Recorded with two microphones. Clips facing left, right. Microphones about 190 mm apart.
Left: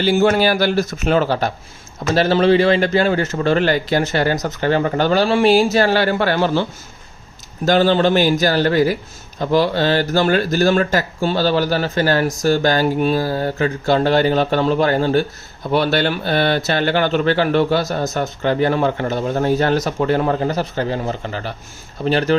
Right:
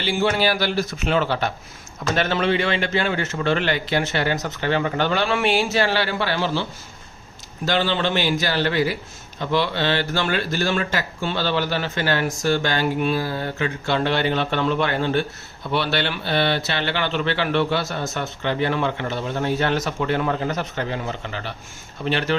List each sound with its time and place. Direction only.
0.0 s speech: 45° left (ahead or behind)